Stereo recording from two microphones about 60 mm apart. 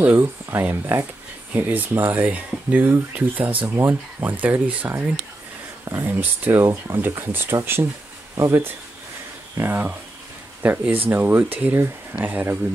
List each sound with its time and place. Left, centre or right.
0.0 s speech: right
1.5 s speech: right
5.9 s speech: right
9.6 s speech: right